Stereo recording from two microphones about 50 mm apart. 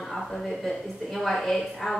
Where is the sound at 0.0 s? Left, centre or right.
Centre.